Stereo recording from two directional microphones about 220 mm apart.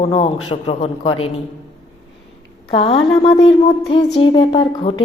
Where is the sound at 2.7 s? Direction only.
25° left (ahead or behind).